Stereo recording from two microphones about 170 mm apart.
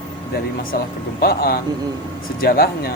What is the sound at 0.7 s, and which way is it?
A man's voice, 65° left (ahead or behind).